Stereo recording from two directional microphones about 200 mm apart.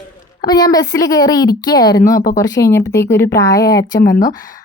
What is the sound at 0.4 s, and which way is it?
A woman's voice, 20° left (ahead or behind).